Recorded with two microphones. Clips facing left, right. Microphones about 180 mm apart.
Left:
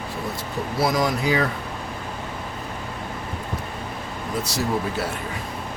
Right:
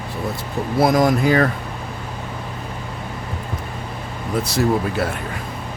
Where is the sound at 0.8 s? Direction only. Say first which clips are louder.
Right 6 dB; 50° right (ahead or behind).